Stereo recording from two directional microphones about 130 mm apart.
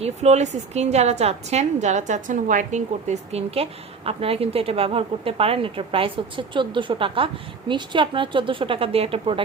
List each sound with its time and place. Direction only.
0.0 s a woman's voice: 60° right (ahead or behind)